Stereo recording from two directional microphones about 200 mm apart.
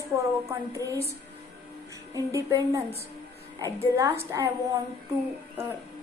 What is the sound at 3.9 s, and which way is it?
Speech, 15° right (ahead or behind).